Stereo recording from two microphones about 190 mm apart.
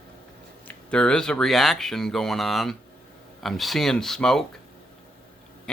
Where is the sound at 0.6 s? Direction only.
5° left (ahead or behind).